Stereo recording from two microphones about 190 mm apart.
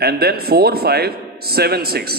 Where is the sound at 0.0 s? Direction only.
55° right (ahead or behind).